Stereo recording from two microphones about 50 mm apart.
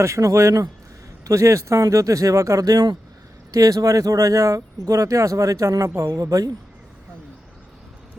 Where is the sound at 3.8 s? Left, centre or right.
Right.